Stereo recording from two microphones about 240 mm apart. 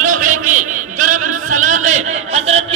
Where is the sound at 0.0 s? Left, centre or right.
Right.